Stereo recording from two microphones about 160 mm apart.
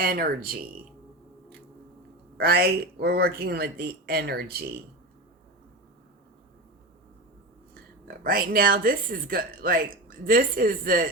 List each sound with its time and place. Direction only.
0.0 s speech: 65° right (ahead or behind)
2.4 s speech: 75° right (ahead or behind)
7.7 s speech: 65° right (ahead or behind)